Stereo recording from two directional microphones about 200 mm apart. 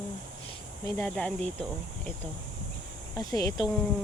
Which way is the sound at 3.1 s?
20° left (ahead or behind).